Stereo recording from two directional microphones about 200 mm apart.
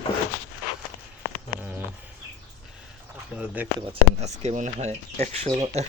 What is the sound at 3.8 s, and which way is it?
Speech, 30° right (ahead or behind).